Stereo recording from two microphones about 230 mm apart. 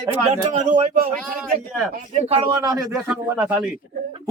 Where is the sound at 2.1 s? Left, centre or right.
Right.